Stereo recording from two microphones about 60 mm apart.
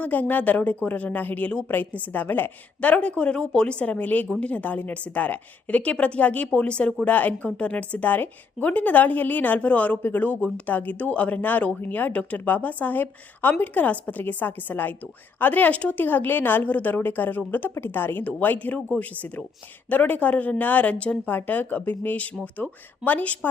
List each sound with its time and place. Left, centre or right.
0.0 s a woman's voice: left